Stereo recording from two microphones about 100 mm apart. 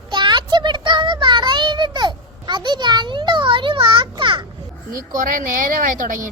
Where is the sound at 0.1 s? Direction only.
50° right (ahead or behind).